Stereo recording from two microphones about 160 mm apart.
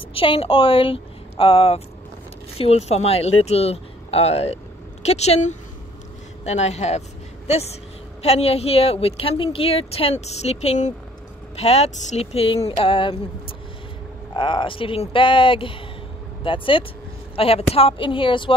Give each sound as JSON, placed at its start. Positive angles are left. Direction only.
{"t": 0.1, "sound": "a woman's voice", "side_deg": 35}